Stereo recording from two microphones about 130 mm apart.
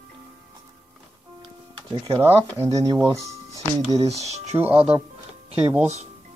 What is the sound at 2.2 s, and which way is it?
Speech, 20° right (ahead or behind).